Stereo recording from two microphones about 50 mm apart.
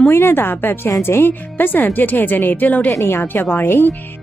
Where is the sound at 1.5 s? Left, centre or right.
Left.